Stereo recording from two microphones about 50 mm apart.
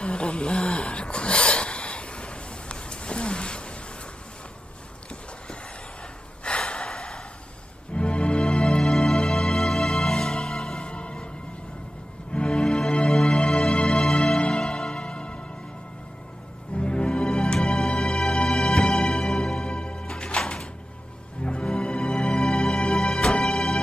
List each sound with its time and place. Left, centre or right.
0.0 s a sound: centre
6.4 s gasp: centre
7.9 s music: left
10.8 s music: left
12.4 s music: centre
16.7 s music: left